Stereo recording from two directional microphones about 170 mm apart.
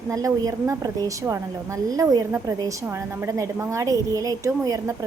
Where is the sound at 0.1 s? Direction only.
20° right (ahead or behind).